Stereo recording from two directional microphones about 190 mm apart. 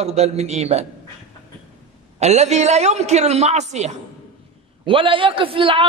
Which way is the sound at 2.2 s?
35° right (ahead or behind).